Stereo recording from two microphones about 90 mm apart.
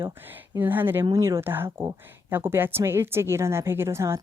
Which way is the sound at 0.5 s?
20° right (ahead or behind).